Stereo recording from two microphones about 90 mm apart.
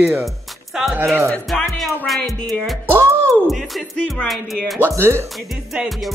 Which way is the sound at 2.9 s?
30° right (ahead or behind).